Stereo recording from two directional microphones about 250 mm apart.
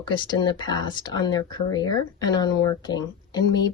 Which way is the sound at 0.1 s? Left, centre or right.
Centre.